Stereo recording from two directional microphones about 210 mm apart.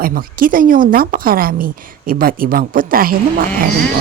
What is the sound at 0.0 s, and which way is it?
Speech, 40° right (ahead or behind).